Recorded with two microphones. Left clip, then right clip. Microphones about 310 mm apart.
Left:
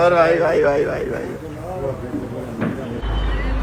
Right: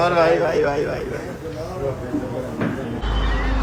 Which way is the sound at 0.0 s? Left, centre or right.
Centre.